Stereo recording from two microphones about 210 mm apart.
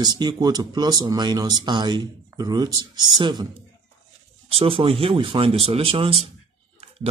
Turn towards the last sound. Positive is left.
turn(degrees=-25)  # may be behind; listen again after turning